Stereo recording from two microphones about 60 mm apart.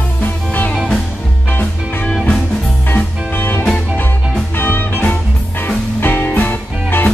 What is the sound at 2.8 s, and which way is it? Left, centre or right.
Music, left.